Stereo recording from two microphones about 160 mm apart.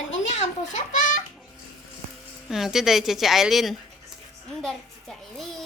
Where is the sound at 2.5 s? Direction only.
5° right (ahead or behind).